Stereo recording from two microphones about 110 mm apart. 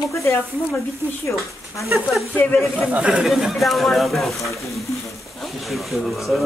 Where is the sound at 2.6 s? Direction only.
Centre (ahead or behind).